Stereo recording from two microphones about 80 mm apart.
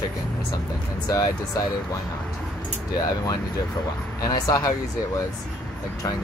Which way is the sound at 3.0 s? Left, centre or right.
Left.